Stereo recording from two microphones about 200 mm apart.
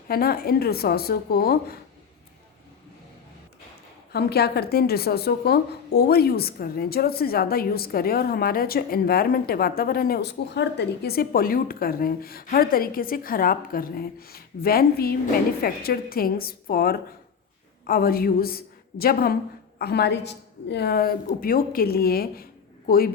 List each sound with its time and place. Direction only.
0.1 s a woman's voice: 50° left (ahead or behind)
4.1 s a woman's voice: 55° left (ahead or behind)